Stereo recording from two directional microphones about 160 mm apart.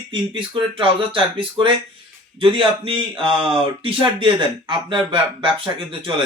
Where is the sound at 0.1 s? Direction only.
30° right (ahead or behind).